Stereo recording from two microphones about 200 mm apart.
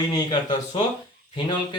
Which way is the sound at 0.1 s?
25° left (ahead or behind).